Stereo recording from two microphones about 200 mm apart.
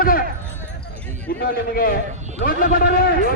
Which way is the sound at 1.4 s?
45° left (ahead or behind).